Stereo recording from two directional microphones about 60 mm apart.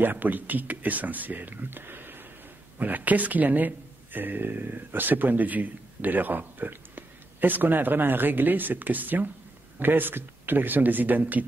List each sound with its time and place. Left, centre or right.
0.0 s speech: right